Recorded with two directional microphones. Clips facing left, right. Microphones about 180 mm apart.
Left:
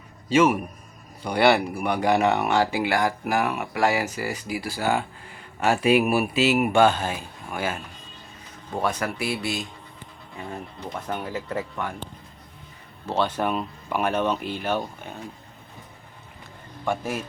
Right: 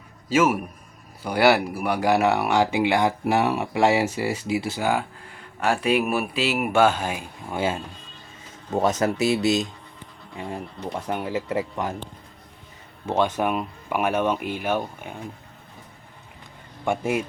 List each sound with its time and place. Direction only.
0.3 s speech: 5° right (ahead or behind); by 4.9 s 25° right (ahead or behind)
5.3 s speech: 5° left (ahead or behind); by 7.5 s 10° right (ahead or behind)
7.5 s speech: 25° right (ahead or behind)
13.1 s speech: 10° right (ahead or behind)
16.8 s speech: 15° right (ahead or behind)